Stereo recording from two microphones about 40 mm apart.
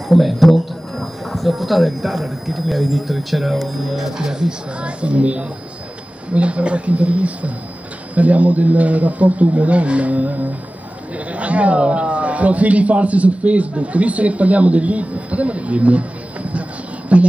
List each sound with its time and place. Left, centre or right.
0.1 s a man's voice: centre
4.2 s a man's voice: centre; by 16.1 s right
17.1 s a man's voice: right